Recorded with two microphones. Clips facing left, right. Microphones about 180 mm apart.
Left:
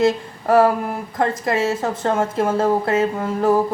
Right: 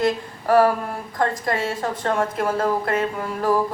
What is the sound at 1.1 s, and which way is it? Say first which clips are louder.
Speech: left 2 dB; 25° left (ahead or behind).